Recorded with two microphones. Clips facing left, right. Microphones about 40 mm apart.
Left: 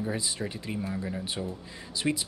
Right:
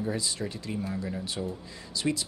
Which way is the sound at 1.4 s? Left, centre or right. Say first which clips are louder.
Right 3 dB; centre.